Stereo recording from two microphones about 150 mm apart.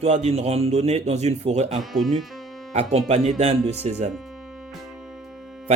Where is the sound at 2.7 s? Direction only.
50° right (ahead or behind).